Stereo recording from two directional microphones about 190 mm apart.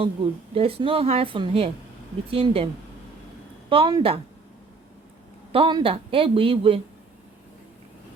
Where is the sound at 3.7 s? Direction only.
25° right (ahead or behind).